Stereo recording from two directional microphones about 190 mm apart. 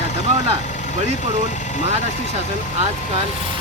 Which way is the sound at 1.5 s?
40° left (ahead or behind).